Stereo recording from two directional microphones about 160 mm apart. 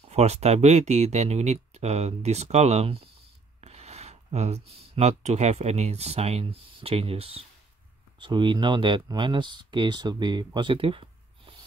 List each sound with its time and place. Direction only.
0.1 s speech: 40° right (ahead or behind)